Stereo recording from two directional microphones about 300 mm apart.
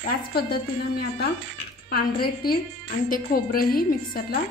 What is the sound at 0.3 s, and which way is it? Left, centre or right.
A woman's voice, left.